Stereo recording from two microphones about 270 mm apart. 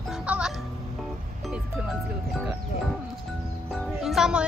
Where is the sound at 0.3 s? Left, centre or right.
Centre.